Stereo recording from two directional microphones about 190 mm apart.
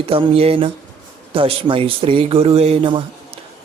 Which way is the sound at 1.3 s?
30° right (ahead or behind).